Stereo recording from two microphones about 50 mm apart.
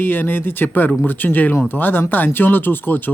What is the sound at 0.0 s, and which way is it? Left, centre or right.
Speech, left.